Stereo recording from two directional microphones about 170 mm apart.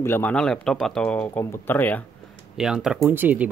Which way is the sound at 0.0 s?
10° left (ahead or behind).